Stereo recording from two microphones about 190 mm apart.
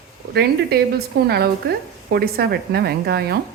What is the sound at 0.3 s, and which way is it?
A woman's voice, 55° right (ahead or behind).